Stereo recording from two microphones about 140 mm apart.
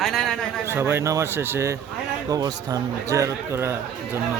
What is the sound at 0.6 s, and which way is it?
A man's voice, 15° right (ahead or behind).